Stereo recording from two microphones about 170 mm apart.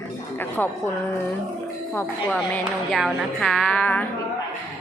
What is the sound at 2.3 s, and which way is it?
Music, centre (ahead or behind).